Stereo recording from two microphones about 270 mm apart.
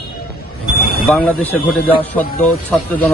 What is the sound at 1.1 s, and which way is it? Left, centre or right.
Speech, centre.